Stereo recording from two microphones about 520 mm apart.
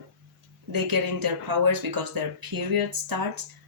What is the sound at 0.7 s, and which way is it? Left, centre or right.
Speech, right.